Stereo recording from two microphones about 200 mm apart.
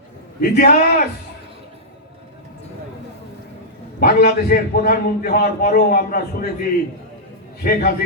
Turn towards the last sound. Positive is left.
turn(degrees=45)  # may be behind; listen again after turning